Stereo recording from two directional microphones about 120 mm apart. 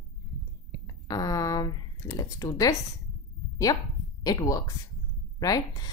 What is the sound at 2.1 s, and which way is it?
Speech, 30° left (ahead or behind).